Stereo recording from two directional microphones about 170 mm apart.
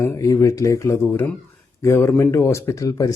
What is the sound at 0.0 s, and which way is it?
Speech, 15° left (ahead or behind).